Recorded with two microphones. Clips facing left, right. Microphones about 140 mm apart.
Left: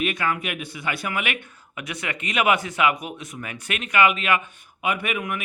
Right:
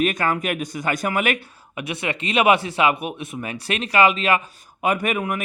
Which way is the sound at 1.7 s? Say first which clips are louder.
Right 5 dB; 25° right (ahead or behind).